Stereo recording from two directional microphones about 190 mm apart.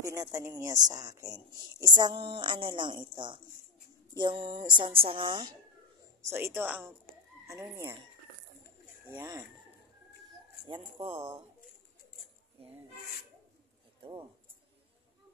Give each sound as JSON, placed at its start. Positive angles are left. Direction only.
{"t": 0.0, "sound": "speech", "side_deg": -15}
{"t": 9.1, "sound": "speech", "side_deg": -10}
{"t": 10.7, "sound": "speech", "side_deg": -25}